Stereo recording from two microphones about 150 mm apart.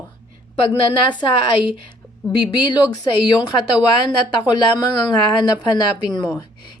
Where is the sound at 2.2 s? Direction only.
25° left (ahead or behind).